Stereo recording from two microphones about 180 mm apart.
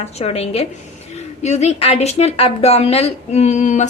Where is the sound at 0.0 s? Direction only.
35° left (ahead or behind).